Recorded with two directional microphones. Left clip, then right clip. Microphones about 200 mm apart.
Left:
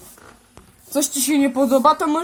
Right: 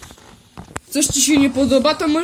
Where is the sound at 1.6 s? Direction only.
25° left (ahead or behind).